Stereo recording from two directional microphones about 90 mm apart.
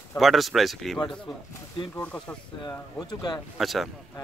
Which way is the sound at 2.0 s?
10° left (ahead or behind).